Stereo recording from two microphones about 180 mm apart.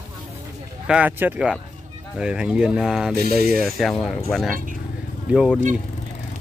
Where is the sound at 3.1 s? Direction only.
60° right (ahead or behind).